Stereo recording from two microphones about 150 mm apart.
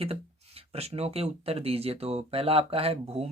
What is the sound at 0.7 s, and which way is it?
Speech, 45° right (ahead or behind).